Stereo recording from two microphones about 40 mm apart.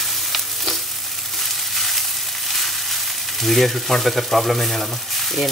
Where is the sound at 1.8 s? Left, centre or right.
Centre.